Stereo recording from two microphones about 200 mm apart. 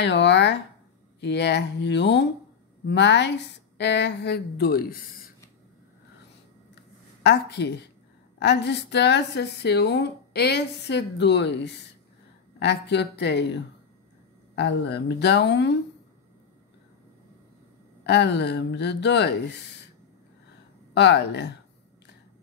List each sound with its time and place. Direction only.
0.0 s speech: 60° left (ahead or behind)
7.2 s speech: 55° left (ahead or behind)
18.0 s speech: 55° left (ahead or behind)
20.9 s speech: 60° left (ahead or behind)